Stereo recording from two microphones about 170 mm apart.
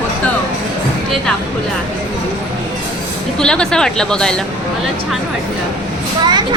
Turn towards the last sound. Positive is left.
turn(degrees=-25)  # may be behind; listen again after turning